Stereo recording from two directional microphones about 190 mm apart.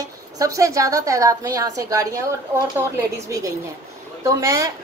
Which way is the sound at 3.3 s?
15° right (ahead or behind).